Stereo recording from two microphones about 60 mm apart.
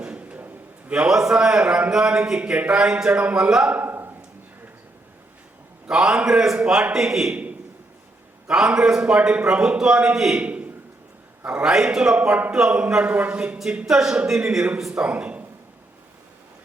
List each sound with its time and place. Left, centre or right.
0.0 s a sound: centre
0.9 s a man's voice: centre
3.7 s a sound: right
5.9 s a man's voice: centre
8.4 s a man's voice: centre
10.4 s a sound: right
11.6 s a man's voice: centre
13.8 s a man's voice: centre
15.0 s speech: centre